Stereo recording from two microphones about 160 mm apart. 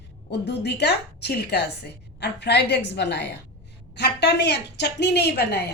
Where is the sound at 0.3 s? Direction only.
90° left.